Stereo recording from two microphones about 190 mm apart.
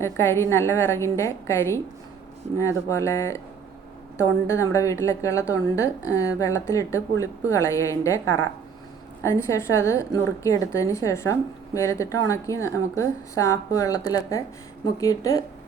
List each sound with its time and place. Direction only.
0.0 s a woman's voice: 15° left (ahead or behind)